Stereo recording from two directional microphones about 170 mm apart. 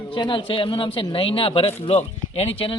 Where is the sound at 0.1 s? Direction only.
30° left (ahead or behind).